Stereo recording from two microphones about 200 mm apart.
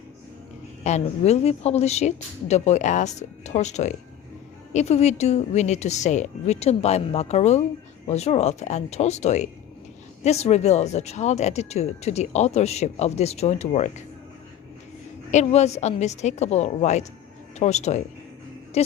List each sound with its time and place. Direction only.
0.9 s speech: 35° left (ahead or behind)
15.3 s speech: 35° left (ahead or behind)